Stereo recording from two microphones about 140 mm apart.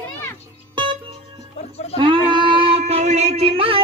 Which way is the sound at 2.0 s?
35° right (ahead or behind).